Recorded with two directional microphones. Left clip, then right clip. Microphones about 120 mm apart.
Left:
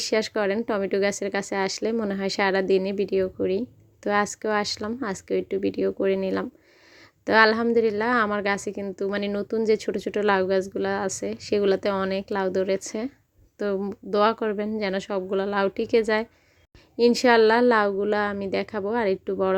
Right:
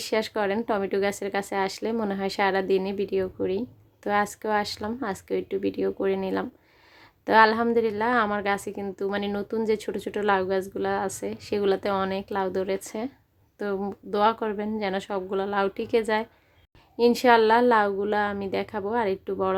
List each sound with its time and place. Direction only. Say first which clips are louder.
0.0 s a woman's voice: left 2 dB; 25° left (ahead or behind)